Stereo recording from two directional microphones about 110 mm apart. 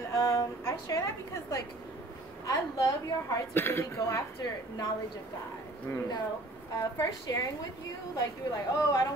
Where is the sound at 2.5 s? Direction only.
30° left (ahead or behind).